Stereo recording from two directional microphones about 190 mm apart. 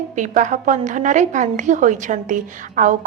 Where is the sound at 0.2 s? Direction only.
40° right (ahead or behind).